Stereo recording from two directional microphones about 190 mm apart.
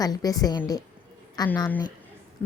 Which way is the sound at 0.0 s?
20° left (ahead or behind).